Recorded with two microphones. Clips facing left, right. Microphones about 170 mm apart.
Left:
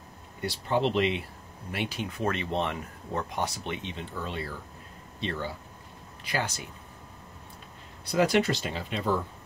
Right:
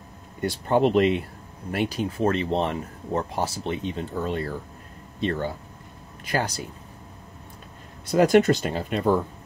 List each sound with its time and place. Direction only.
0.4 s speech: 50° right (ahead or behind)
8.1 s speech: 45° right (ahead or behind)